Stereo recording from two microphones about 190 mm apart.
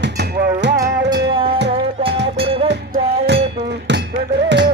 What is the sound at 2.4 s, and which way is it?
Music, 30° right (ahead or behind).